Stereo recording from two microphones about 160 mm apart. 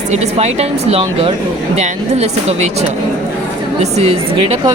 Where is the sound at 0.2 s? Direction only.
40° right (ahead or behind).